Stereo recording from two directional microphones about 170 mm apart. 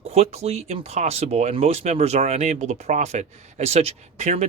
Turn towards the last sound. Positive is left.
turn(degrees=-40)  # may be behind; listen again after turning